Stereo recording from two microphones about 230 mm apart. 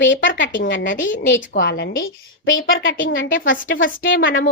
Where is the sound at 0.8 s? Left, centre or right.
Left.